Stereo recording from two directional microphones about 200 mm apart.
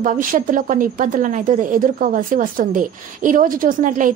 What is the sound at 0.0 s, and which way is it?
A woman's voice, 40° right (ahead or behind).